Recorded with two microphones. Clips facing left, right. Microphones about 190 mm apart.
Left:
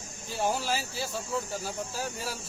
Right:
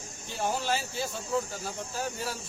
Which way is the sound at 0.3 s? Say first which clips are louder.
Left 1 dB; centre (ahead or behind).